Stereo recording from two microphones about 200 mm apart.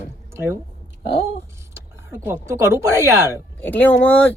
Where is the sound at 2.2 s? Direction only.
15° right (ahead or behind).